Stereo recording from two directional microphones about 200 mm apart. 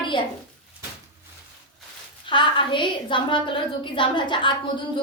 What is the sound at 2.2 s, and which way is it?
A woman's voice, 25° left (ahead or behind).